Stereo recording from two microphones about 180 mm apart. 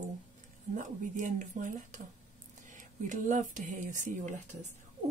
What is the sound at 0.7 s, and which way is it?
Speech, 45° right (ahead or behind).